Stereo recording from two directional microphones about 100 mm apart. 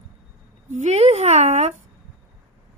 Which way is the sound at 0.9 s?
90° right.